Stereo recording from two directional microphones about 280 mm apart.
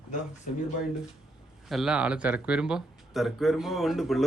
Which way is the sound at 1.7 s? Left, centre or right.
Centre.